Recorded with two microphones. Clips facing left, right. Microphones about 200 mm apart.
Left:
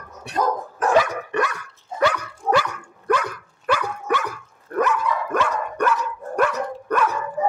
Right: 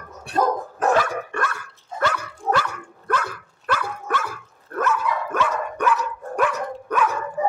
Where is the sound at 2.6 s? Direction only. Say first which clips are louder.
Left 3 dB; 10° left (ahead or behind).